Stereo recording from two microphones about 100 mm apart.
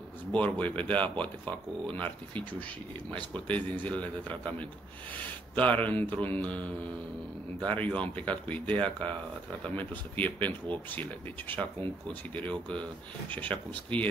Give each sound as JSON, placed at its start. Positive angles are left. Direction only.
{"t": 0.3, "sound": "speech", "side_deg": 15}